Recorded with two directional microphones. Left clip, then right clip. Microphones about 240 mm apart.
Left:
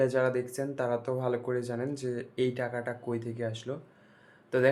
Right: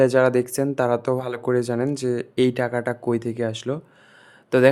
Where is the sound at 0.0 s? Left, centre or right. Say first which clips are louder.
Right 10 dB; right.